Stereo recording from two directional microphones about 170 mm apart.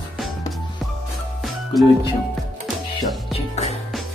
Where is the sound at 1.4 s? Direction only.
Centre (ahead or behind).